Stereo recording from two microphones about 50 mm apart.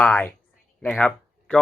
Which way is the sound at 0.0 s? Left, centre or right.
Left.